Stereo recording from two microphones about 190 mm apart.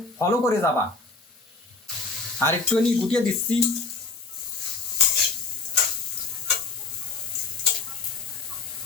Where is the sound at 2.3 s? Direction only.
5° left (ahead or behind).